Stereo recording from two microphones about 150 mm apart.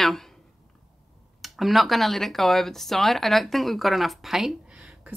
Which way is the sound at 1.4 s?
Centre (ahead or behind).